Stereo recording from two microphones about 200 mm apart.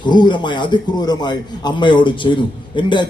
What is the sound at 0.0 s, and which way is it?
A man's voice, 20° left (ahead or behind).